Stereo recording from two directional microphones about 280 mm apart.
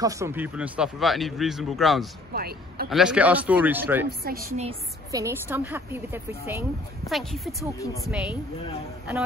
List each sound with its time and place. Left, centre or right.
0.0 s a man's voice: centre
2.3 s a man's voice: right
2.9 s a man's voice: centre
4.2 s a woman's voice: right
4.6 s a woman's voice: right
5.2 s a woman's voice: centre
7.8 s a woman's voice: centre